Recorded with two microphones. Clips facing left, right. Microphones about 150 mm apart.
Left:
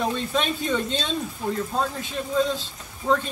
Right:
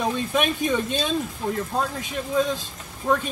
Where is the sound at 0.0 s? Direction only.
15° right (ahead or behind).